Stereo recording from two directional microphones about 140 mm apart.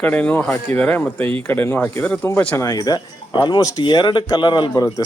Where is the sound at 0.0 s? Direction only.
10° left (ahead or behind).